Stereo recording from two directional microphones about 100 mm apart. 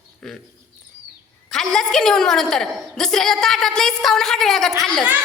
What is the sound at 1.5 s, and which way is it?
A woman's voice, 5° left (ahead or behind).